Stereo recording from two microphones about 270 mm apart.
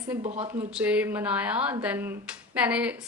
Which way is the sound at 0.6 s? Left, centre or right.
Centre.